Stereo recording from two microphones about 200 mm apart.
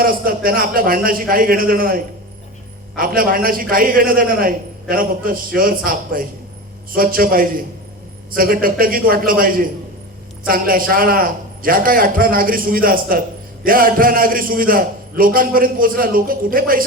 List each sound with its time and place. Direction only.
0.0 s a man's voice: 45° right (ahead or behind)